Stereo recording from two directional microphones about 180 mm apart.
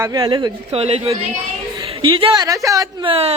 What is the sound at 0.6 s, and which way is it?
Speech, 35° right (ahead or behind).